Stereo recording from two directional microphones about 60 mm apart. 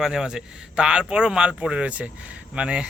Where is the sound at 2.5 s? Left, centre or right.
Centre.